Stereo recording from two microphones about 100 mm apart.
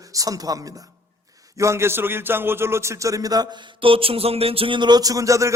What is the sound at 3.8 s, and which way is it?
A man's voice, 65° right (ahead or behind).